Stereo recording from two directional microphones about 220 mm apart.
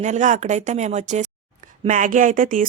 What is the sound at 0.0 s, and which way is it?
A woman's voice, 35° right (ahead or behind).